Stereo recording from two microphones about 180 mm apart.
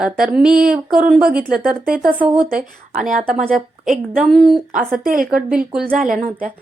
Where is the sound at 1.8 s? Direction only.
50° right (ahead or behind).